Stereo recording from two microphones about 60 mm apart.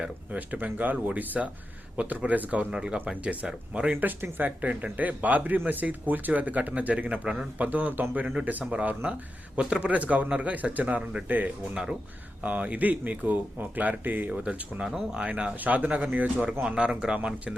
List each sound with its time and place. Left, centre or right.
0.0 s speech: right
4.0 s speech: right
11.7 s speech: centre
12.4 s speech: right